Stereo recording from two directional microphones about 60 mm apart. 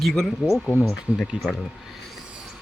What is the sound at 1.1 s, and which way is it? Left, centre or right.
Speech, right.